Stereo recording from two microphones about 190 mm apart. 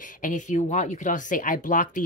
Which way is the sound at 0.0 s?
45° left (ahead or behind).